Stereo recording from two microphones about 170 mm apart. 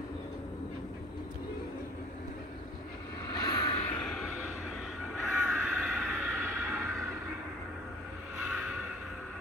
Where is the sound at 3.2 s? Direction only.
25° left (ahead or behind).